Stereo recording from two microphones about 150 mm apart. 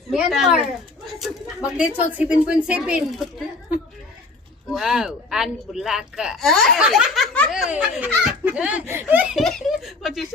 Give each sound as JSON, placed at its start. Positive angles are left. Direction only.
{"t": 0.1, "sound": "speech", "side_deg": -5}
{"t": 4.7, "sound": "speech", "side_deg": 0}